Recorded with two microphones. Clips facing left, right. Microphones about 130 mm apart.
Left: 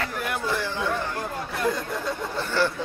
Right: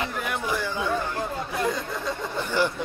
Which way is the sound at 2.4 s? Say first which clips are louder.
Even; 15° right (ahead or behind).